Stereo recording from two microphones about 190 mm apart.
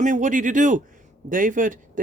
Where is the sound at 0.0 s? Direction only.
40° right (ahead or behind).